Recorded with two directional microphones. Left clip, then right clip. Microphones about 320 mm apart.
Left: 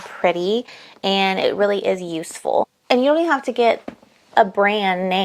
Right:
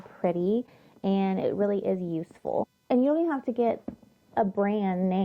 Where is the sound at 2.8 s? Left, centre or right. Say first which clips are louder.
Left 8 dB; centre.